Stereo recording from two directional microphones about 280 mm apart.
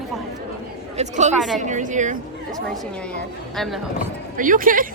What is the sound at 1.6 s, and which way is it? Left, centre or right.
Speech, right.